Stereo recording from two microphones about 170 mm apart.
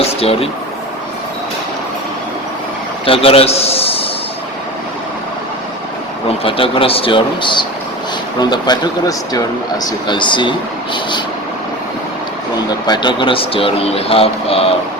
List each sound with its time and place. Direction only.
0.0 s a sound: 35° left (ahead or behind)
3.1 s a man's voice: 35° left (ahead or behind)
6.4 s speech: 30° left (ahead or behind)
12.9 s speech: 25° left (ahead or behind)